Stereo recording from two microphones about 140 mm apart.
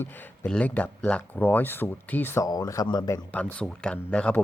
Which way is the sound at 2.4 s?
25° left (ahead or behind).